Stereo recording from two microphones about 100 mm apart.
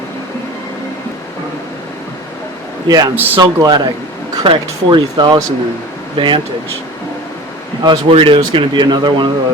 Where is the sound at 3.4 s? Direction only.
45° right (ahead or behind).